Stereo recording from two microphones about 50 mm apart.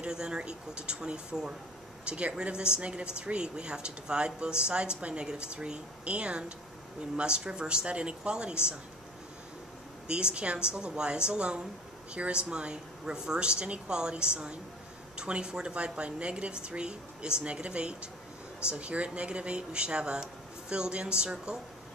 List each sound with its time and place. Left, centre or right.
0.0 s a woman's voice: centre
10.0 s a woman's voice: centre